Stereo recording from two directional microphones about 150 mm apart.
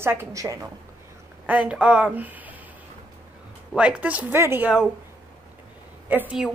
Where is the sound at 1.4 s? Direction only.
10° right (ahead or behind).